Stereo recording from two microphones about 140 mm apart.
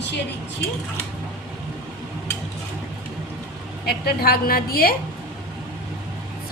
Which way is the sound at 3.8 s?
90° left.